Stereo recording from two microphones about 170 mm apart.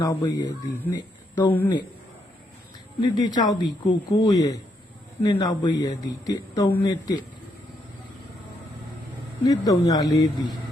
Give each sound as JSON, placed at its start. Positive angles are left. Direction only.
{"t": 0.0, "sound": "a man's voice", "side_deg": 20}
{"t": 3.0, "sound": "a man's voice", "side_deg": 25}
{"t": 9.4, "sound": "a man's voice", "side_deg": 20}